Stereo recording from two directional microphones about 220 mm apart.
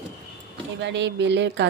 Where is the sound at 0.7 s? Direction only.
55° right (ahead or behind).